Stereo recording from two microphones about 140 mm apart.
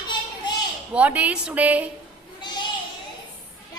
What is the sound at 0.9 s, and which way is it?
Speech, 10° right (ahead or behind).